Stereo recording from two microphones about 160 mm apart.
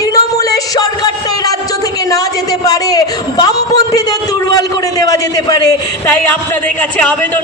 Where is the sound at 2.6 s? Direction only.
25° left (ahead or behind).